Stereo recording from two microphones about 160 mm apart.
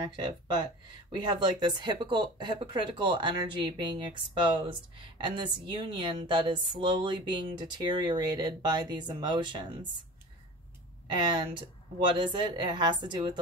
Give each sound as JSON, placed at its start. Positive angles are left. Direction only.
{"t": 0.0, "sound": "speech", "side_deg": -25}
{"t": 11.1, "sound": "speech", "side_deg": -30}